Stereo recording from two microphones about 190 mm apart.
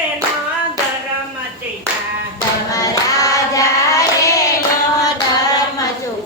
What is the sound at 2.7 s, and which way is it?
Child singing, 20° left (ahead or behind).